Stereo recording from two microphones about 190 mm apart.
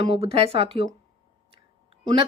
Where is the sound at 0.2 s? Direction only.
30° right (ahead or behind).